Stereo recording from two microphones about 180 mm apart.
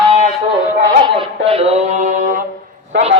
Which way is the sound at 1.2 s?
30° right (ahead or behind).